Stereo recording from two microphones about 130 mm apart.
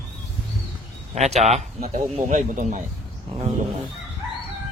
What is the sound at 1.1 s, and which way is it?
A man's voice, 60° right (ahead or behind).